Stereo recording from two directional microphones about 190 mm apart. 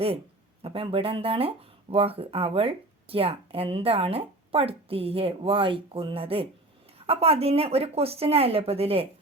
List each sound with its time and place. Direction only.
0.6 s speech: 30° right (ahead or behind)